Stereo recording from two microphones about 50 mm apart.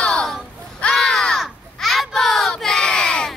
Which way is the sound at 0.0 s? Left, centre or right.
Centre.